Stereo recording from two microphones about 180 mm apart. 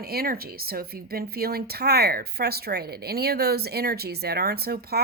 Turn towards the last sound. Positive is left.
turn(degrees=-60)  # may be behind; listen again after turning